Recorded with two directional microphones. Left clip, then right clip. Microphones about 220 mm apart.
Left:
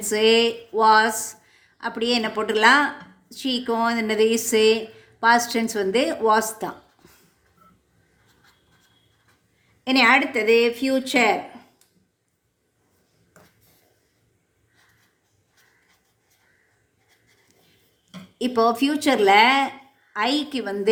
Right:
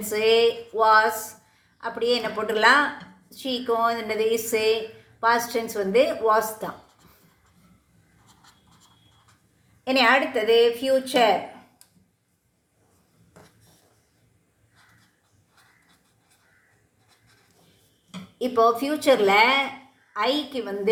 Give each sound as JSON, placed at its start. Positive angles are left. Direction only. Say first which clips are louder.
{"t": 0.1, "sound": "a woman's voice", "louder": "left 1 dB", "side_deg": 40}
{"t": 9.9, "sound": "a woman's voice", "louder": "left 2 dB", "side_deg": 40}
{"t": 18.3, "sound": "a woman's voice", "louder": "even", "side_deg": 35}